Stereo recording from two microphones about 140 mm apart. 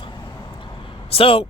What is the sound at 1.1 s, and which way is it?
Speech, 45° left (ahead or behind).